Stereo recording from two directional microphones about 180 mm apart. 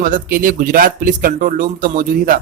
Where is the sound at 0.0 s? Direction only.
50° right (ahead or behind).